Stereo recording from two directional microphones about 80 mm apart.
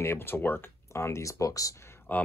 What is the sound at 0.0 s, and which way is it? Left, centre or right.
Speech, left.